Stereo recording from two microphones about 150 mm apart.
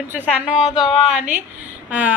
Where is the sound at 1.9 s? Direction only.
10° right (ahead or behind).